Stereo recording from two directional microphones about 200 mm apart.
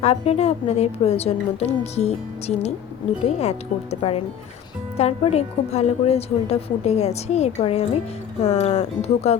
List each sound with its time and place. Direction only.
0.0 s a woman's voice: 30° left (ahead or behind)